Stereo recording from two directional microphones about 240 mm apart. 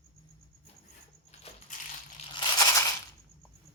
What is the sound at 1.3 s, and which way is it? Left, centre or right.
Coin, left.